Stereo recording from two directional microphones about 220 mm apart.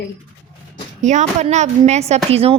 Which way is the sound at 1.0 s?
35° right (ahead or behind).